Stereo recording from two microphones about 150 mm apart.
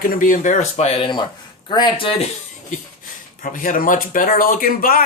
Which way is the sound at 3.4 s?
65° left (ahead or behind).